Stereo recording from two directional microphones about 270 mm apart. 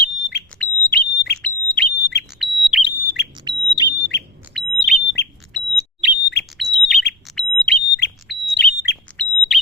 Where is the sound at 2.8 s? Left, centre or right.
Left.